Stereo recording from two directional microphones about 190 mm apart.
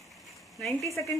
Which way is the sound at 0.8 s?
15° left (ahead or behind).